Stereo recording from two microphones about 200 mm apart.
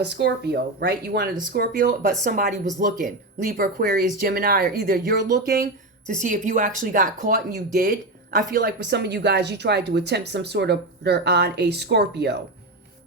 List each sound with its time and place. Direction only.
0.0 s a woman's voice: 55° right (ahead or behind)
1.5 s speech: 40° right (ahead or behind)
8.8 s a woman's voice: 55° right (ahead or behind)